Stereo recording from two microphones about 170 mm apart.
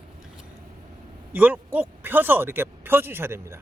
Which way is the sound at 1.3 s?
10° right (ahead or behind).